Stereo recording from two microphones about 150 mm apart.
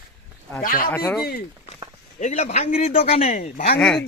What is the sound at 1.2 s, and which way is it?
Speech, 90° left.